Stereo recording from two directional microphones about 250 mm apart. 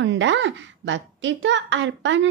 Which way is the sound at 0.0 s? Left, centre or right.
Right.